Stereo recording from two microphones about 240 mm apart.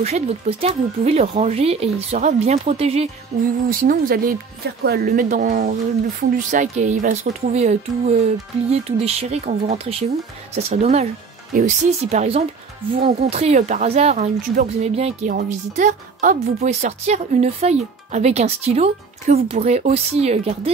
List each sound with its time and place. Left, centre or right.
0.0 s speech: right
3.8 s speech: right